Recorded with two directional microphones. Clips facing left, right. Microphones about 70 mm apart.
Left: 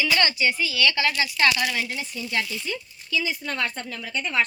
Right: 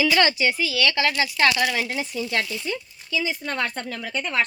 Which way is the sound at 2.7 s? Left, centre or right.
Right.